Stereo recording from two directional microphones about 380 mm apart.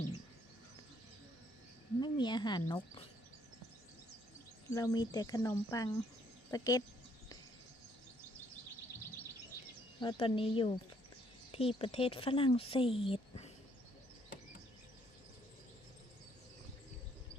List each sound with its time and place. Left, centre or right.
2.0 s speech: centre
4.7 s speech: centre
10.0 s speech: centre